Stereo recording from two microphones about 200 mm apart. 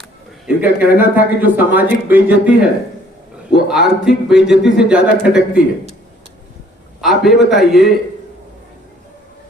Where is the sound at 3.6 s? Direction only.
Centre (ahead or behind).